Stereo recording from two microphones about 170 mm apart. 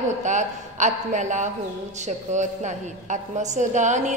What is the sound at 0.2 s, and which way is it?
A woman's voice, 45° right (ahead or behind).